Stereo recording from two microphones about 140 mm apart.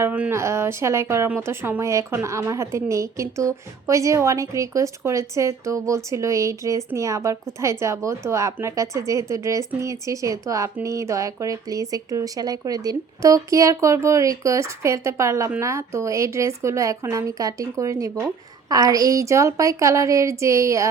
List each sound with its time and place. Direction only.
0.0 s speech: 15° right (ahead or behind)